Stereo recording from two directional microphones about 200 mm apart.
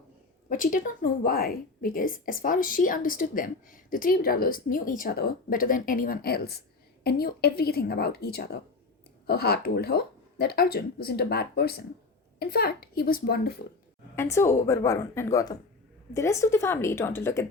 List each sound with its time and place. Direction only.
0.4 s a woman's voice: 40° left (ahead or behind)
14.2 s a woman's voice: 15° left (ahead or behind)